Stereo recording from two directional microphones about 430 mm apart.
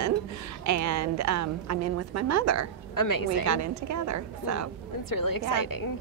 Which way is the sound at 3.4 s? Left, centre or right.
Right.